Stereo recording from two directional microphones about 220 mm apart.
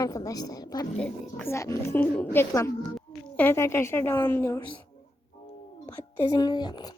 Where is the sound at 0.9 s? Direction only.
5° left (ahead or behind).